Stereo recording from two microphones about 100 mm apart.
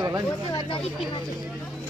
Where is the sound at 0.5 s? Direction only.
60° left (ahead or behind).